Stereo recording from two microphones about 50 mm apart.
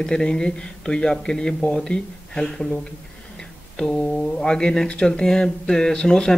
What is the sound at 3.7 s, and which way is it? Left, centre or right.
Speech, centre.